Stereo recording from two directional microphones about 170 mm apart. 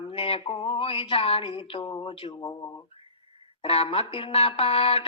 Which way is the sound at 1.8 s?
20° left (ahead or behind).